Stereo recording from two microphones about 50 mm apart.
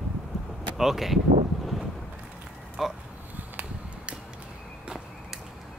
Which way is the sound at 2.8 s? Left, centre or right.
Centre.